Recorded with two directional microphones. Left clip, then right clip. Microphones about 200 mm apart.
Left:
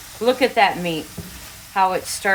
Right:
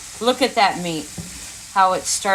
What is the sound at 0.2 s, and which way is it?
Speech, 20° left (ahead or behind).